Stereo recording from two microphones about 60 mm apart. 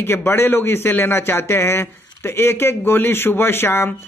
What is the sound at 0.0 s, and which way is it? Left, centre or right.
Speech, left.